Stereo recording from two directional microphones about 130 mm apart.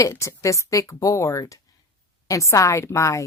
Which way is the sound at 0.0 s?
20° left (ahead or behind).